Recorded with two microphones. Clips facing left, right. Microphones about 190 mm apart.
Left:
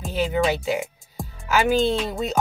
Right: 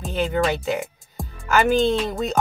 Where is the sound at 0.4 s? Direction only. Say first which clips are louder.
Left 1 dB; centre (ahead or behind).